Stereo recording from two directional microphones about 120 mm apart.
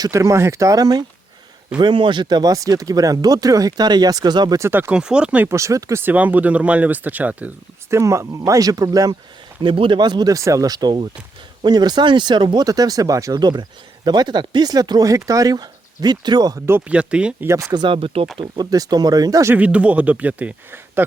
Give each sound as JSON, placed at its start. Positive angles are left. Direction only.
{"t": 0.0, "sound": "speech", "side_deg": -25}
{"t": 1.8, "sound": "speech", "side_deg": -40}
{"t": 4.6, "sound": "a man's voice", "side_deg": -15}
{"t": 4.9, "sound": "a man's voice", "side_deg": -5}
{"t": 5.5, "sound": "speech", "side_deg": -25}
{"t": 9.6, "sound": "speech", "side_deg": -45}
{"t": 16.6, "sound": "speech", "side_deg": -20}
{"t": 16.9, "sound": "a man's voice", "side_deg": -10}
{"t": 17.5, "sound": "speech", "side_deg": -30}
{"t": 18.3, "sound": "speech", "side_deg": -35}
{"t": 19.5, "sound": "a man's voice", "side_deg": -10}